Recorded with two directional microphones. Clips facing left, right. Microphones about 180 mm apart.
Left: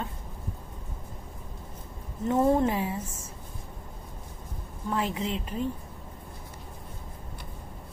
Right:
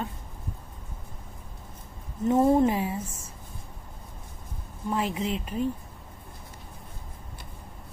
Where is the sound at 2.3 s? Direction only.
20° right (ahead or behind).